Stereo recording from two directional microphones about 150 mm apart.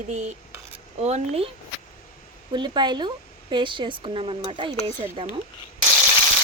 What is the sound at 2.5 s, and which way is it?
Speech, 30° right (ahead or behind).